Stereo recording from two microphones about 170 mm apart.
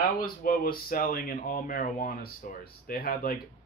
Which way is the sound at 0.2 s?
60° left (ahead or behind).